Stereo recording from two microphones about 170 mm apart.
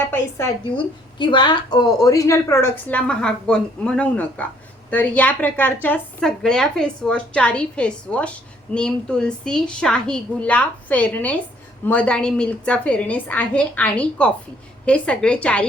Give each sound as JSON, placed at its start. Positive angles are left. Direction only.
{"t": 0.6, "sound": "a woman's voice", "side_deg": 25}